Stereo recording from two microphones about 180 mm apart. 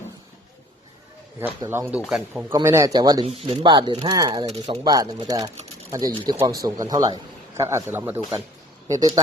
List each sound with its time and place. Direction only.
1.4 s speech: 10° right (ahead or behind)
2.5 s a man's voice: 15° right (ahead or behind)
3.2 s a man's voice: 35° right (ahead or behind)